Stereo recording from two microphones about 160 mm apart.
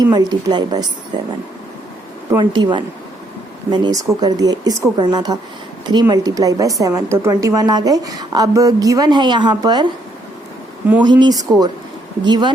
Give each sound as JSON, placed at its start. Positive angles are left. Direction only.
{"t": 0.0, "sound": "a woman's voice", "side_deg": -25}
{"t": 2.4, "sound": "a woman's voice", "side_deg": -30}
{"t": 11.0, "sound": "a woman's voice", "side_deg": -25}